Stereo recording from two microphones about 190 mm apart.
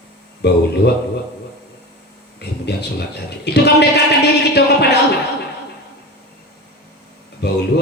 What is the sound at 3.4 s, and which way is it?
A man's voice, 60° left (ahead or behind).